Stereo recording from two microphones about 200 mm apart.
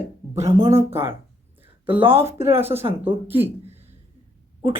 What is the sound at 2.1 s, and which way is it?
Speech, 10° right (ahead or behind).